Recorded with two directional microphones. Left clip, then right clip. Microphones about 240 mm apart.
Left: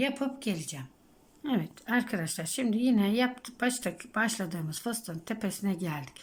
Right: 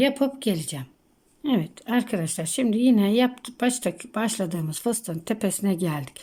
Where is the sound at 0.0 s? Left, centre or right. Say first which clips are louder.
Right 9 dB; centre.